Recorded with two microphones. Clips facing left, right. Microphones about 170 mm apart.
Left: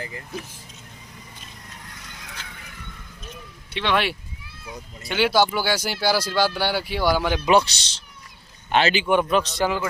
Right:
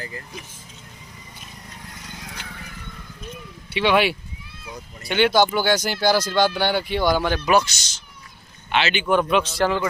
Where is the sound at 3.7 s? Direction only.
5° right (ahead or behind).